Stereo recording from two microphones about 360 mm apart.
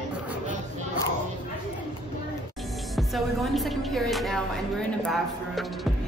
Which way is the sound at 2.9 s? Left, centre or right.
Centre.